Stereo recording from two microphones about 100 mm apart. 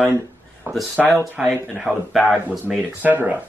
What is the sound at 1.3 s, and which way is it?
Speech, 5° right (ahead or behind).